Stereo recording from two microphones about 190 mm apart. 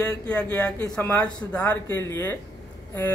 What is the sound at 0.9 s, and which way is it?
A man's voice, 5° left (ahead or behind).